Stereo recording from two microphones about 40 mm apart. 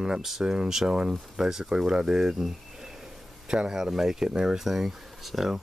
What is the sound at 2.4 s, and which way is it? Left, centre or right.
Cricket, centre.